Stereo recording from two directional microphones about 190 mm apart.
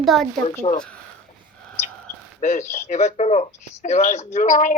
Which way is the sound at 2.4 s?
40° left (ahead or behind).